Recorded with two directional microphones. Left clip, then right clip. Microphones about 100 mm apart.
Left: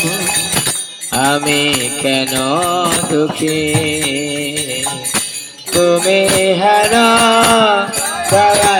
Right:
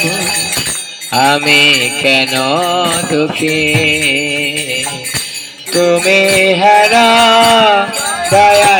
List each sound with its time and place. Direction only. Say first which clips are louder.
1.1 s mantra: right 5 dB; 25° left (ahead or behind)
5.8 s music: right 2 dB; 30° left (ahead or behind)